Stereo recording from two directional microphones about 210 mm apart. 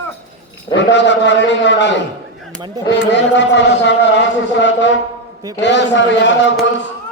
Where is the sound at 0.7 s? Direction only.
60° left (ahead or behind).